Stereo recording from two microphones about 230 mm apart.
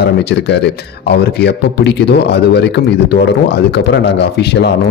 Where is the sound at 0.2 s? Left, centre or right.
Left.